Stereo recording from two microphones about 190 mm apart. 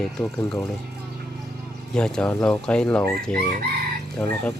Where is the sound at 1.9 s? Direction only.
5° left (ahead or behind).